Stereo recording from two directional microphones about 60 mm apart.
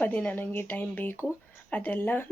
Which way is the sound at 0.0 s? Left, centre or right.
Left.